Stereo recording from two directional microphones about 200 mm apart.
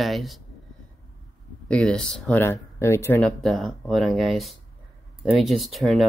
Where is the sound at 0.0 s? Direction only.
Centre (ahead or behind).